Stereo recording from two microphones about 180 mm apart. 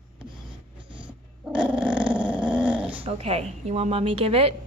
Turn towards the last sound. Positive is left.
turn(degrees=-30)  # may be behind; listen again after turning